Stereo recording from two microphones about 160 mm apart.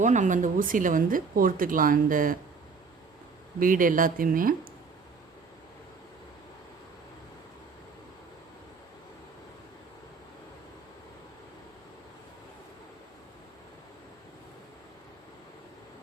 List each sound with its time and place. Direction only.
0.0 s speech: 50° right (ahead or behind)
3.6 s speech: 60° right (ahead or behind)